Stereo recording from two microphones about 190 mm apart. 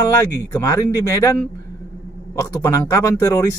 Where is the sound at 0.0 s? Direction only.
15° left (ahead or behind).